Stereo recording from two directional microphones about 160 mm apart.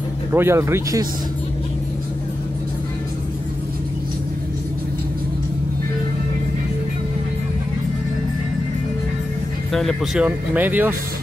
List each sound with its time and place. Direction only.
0.3 s speech: 15° right (ahead or behind)
9.7 s speech: centre (ahead or behind)